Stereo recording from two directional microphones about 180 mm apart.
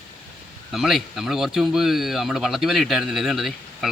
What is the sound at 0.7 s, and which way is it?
Speech, centre (ahead or behind).